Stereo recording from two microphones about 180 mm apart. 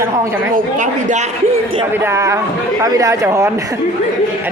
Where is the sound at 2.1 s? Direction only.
15° right (ahead or behind).